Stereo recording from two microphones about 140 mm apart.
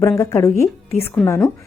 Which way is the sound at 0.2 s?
20° left (ahead or behind).